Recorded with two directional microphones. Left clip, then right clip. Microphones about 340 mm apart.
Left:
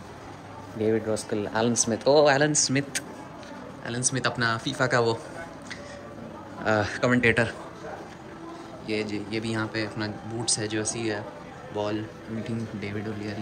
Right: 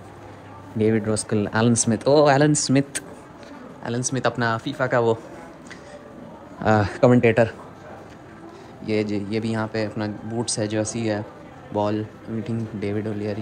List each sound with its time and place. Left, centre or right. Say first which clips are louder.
1.1 s speech: right 4 dB; centre
6.6 s speech: right 6 dB; centre
8.8 s speech: right 6 dB; centre